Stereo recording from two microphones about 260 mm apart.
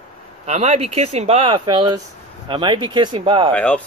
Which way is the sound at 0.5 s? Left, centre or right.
Right.